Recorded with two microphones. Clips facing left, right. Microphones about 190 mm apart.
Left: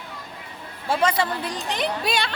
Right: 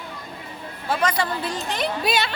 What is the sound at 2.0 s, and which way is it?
Speech, 5° right (ahead or behind).